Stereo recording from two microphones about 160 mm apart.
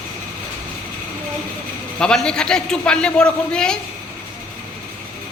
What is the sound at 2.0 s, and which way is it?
A man's voice, 5° left (ahead or behind).